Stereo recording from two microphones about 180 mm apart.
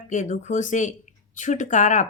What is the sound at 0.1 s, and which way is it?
Speech, 45° left (ahead or behind).